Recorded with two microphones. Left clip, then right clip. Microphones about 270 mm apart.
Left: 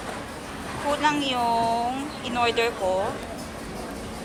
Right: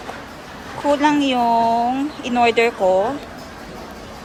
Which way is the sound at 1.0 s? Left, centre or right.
Right.